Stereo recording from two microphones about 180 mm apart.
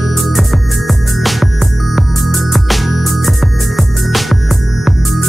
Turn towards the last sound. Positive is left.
turn(degrees=0)  # may be behind; listen again after turning